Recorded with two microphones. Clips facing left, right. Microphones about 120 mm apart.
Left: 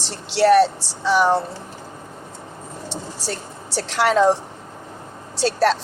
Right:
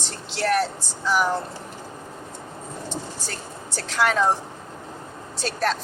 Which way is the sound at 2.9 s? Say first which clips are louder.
Left 4 dB; 75° left (ahead or behind).